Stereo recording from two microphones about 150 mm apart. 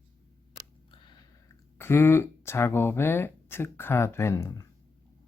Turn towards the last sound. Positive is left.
turn(degrees=15)  # may be behind; listen again after turning